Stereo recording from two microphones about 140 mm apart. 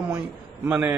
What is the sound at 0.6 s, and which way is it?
Speech, 10° right (ahead or behind).